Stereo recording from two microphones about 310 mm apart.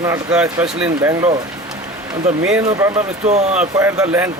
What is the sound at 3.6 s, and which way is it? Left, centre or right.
Speech, centre.